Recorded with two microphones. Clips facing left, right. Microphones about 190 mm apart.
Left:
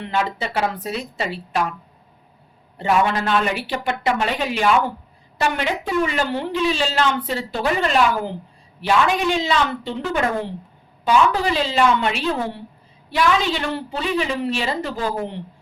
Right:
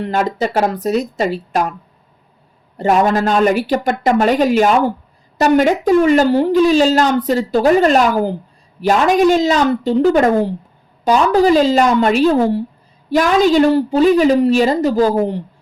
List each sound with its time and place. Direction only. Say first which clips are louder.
0.0 s speech: right 6 dB; 45° right (ahead or behind)
2.7 s a woman's voice: right 6 dB; 40° right (ahead or behind)